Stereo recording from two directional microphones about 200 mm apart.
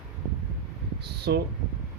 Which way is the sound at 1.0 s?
55° right (ahead or behind).